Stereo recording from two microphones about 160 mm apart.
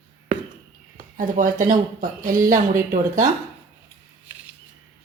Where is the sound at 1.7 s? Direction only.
55° right (ahead or behind).